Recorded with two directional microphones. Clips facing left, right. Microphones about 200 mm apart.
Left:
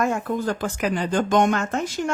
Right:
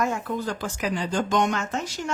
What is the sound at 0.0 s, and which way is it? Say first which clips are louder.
Speech: left 3 dB; 50° left (ahead or behind).